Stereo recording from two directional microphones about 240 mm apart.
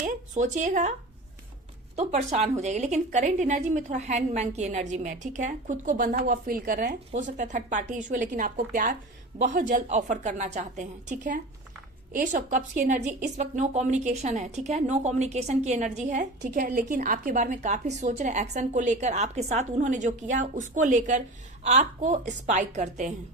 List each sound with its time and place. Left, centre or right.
0.0 s a woman's voice: right
2.0 s a woman's voice: right